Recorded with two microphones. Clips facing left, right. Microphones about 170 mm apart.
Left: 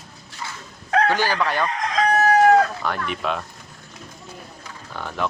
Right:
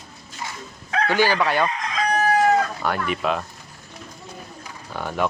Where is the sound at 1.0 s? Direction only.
10° right (ahead or behind).